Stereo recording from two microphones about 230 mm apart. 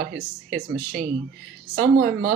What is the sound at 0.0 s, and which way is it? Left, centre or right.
Speech, right.